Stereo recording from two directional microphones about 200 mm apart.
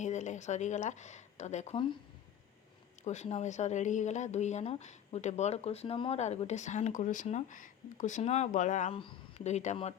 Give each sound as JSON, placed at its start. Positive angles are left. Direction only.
{"t": 0.0, "sound": "speech", "side_deg": 35}
{"t": 3.0, "sound": "speech", "side_deg": 35}